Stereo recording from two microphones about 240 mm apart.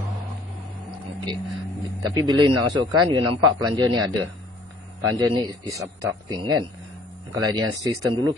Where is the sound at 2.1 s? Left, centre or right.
Centre.